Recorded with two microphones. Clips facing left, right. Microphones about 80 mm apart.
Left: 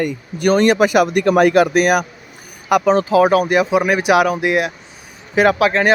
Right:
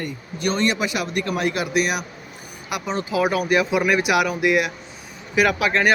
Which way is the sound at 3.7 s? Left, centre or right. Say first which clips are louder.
Left 5 dB; left.